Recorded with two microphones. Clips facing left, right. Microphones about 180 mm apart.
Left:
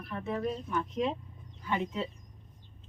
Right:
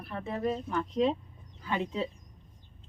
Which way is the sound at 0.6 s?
35° right (ahead or behind).